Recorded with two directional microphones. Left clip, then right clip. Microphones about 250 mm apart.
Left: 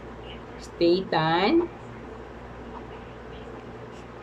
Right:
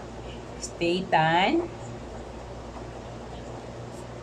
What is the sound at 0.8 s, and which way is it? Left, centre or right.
Speech, centre.